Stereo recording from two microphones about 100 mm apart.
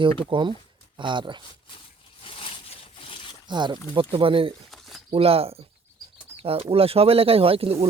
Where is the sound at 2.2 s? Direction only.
60° left (ahead or behind).